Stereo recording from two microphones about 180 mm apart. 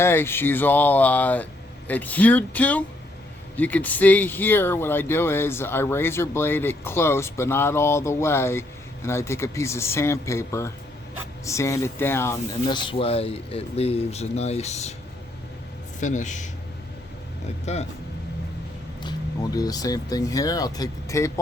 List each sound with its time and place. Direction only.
0.0 s speech: 15° left (ahead or behind); by 14.9 s 40° left (ahead or behind)
16.0 s speech: 45° left (ahead or behind)
17.7 s speech: 40° left (ahead or behind)
19.5 s speech: 20° left (ahead or behind)